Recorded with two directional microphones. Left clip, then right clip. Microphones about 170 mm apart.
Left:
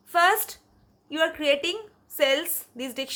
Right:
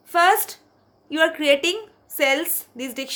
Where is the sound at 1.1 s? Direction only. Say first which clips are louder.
Right 5 dB; 10° right (ahead or behind).